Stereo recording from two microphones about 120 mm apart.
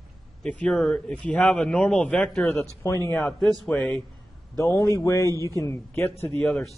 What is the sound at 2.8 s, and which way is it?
Speech, 25° left (ahead or behind).